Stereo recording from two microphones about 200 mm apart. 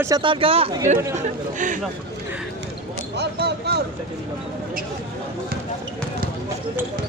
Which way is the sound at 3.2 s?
55° right (ahead or behind).